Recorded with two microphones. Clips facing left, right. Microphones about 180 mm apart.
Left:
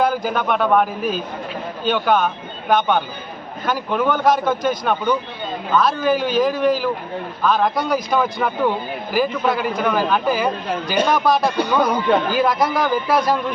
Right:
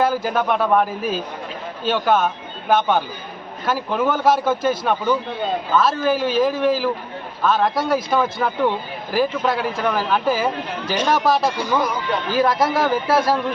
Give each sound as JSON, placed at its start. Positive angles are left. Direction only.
{"t": 0.0, "sound": "speech", "side_deg": -5}
{"t": 11.5, "sound": "speech", "side_deg": 65}
{"t": 12.4, "sound": "speech", "side_deg": 0}